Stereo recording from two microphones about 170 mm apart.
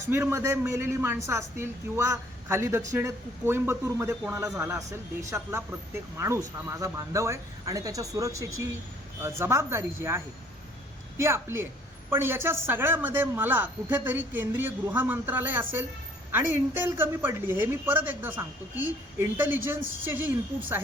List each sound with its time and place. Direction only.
0.1 s a woman's voice: 15° right (ahead or behind)